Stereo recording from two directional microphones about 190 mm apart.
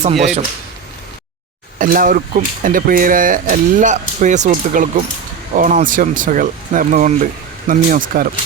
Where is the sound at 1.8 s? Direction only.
45° right (ahead or behind).